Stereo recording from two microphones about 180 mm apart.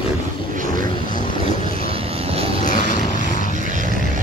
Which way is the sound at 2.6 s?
45° left (ahead or behind).